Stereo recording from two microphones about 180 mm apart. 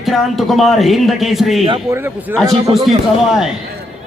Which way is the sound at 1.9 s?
10° right (ahead or behind).